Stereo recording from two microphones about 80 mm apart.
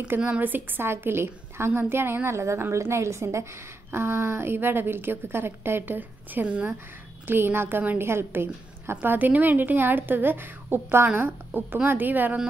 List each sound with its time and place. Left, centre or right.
0.2 s a woman's voice: centre